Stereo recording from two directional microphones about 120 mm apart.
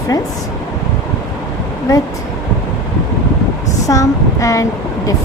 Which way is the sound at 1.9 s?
30° left (ahead or behind).